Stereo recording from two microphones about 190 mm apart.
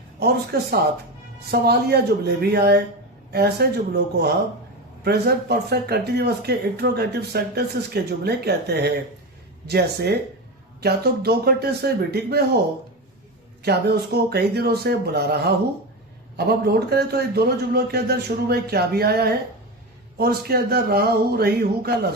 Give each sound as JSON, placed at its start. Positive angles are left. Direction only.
{"t": 0.2, "sound": "speech", "side_deg": -55}
{"t": 13.6, "sound": "speech", "side_deg": -60}